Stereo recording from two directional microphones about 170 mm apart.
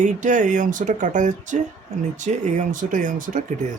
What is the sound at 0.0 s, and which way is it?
Speech, 50° right (ahead or behind).